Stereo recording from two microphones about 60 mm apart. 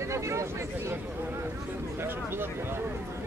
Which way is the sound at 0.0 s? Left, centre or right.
Right.